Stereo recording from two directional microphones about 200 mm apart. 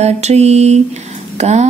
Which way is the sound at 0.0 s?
35° right (ahead or behind).